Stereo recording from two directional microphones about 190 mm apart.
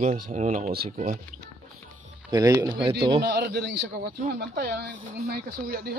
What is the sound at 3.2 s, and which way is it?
Speech, 60° right (ahead or behind).